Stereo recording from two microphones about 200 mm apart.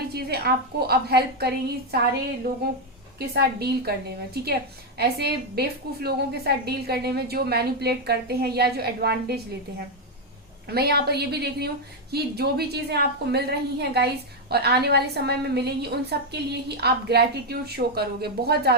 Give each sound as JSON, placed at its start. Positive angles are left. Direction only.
{"t": 0.1, "sound": "a woman's voice", "side_deg": -50}
{"t": 3.2, "sound": "a woman's voice", "side_deg": -50}
{"t": 4.9, "sound": "a woman's voice", "side_deg": -55}